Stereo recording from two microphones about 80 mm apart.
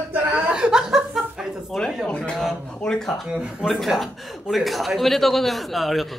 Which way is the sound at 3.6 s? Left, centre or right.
Centre.